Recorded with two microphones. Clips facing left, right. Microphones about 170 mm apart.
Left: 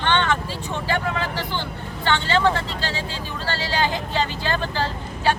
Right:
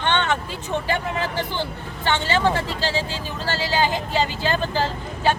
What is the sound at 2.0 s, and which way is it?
Speech, 15° right (ahead or behind).